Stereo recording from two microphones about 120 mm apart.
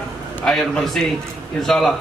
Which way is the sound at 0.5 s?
5° left (ahead or behind).